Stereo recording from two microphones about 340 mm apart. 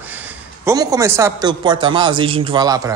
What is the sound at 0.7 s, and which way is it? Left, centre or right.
Speech, centre.